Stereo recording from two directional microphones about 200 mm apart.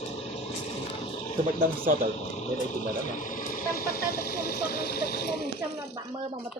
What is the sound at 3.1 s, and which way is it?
Speech, 45° left (ahead or behind).